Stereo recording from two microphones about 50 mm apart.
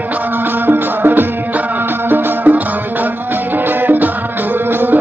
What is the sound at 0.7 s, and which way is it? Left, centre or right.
Music, right.